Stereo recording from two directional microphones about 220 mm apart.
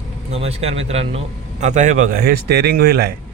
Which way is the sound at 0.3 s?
30° right (ahead or behind).